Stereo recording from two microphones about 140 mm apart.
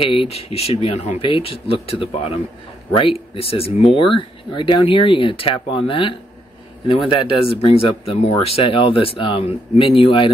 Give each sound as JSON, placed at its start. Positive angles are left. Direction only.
{"t": 0.0, "sound": "speech", "side_deg": 40}
{"t": 1.2, "sound": "speech", "side_deg": 40}
{"t": 3.3, "sound": "speech", "side_deg": 45}